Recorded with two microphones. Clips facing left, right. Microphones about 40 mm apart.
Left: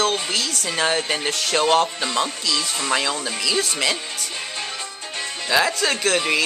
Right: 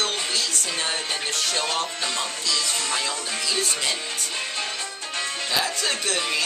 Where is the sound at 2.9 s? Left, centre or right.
Left.